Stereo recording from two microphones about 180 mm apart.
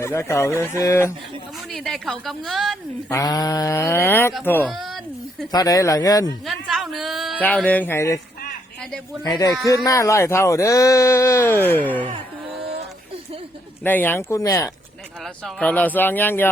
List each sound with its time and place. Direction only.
0.0 s speech: 15° left (ahead or behind)
1.7 s a woman's voice: centre (ahead or behind)
3.1 s speech: 20° left (ahead or behind)
4.7 s speech: centre (ahead or behind)
5.5 s speech: 20° left (ahead or behind)
6.4 s a sound: centre (ahead or behind)
7.4 s speech: 10° left (ahead or behind)
9.2 s speech: 20° left (ahead or behind)
13.8 s speech: 10° left (ahead or behind)
15.2 s speech: centre (ahead or behind)